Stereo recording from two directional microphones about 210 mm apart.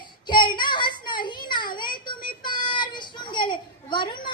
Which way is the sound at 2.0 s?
20° left (ahead or behind).